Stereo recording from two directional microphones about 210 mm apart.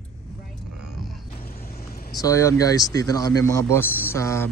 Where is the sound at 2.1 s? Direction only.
15° left (ahead or behind).